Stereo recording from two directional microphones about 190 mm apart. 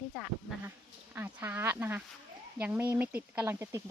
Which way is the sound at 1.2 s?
10° right (ahead or behind).